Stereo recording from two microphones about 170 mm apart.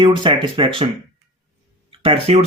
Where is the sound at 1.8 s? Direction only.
35° right (ahead or behind).